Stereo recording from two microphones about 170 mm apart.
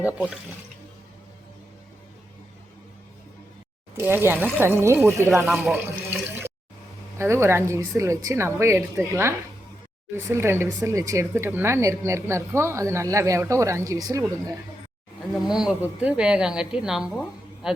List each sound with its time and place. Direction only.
3.9 s speech: 15° right (ahead or behind)
5.5 s a woman's voice: centre (ahead or behind)
7.2 s speech: 15° right (ahead or behind)
15.4 s a woman's voice: 5° right (ahead or behind)